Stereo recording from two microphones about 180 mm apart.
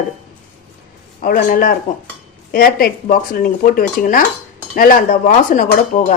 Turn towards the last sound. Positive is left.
turn(degrees=45)  # may be behind; listen again after turning